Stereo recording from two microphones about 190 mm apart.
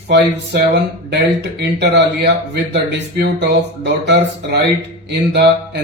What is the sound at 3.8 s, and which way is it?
Speech, 65° right (ahead or behind).